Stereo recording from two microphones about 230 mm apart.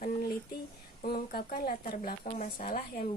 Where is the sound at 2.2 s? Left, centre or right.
Left.